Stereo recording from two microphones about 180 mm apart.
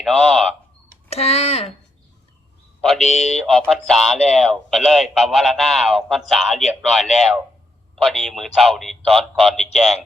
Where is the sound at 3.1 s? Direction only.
40° left (ahead or behind).